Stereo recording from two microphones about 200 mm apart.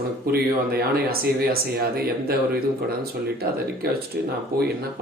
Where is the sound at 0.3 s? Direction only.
50° right (ahead or behind).